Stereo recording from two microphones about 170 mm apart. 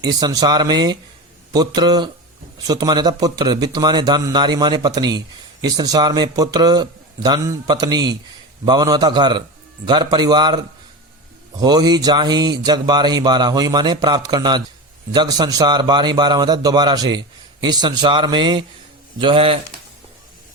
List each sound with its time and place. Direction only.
0.0 s speech: 25° right (ahead or behind)